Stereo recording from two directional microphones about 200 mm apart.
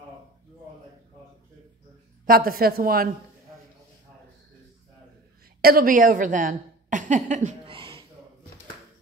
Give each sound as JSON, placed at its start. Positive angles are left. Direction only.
{"t": 2.2, "sound": "speech", "side_deg": -45}
{"t": 5.6, "sound": "a woman's voice", "side_deg": -50}